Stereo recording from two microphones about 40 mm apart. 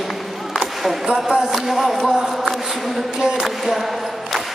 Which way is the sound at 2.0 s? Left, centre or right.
Centre.